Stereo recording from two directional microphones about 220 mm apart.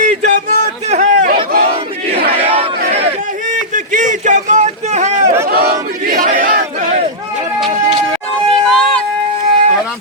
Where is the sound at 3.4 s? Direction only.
35° right (ahead or behind).